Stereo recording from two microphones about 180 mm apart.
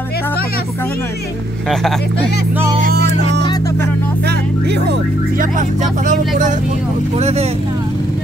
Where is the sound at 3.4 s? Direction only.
20° left (ahead or behind).